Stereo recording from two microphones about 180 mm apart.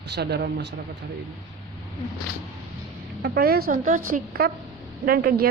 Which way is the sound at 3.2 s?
60° right (ahead or behind).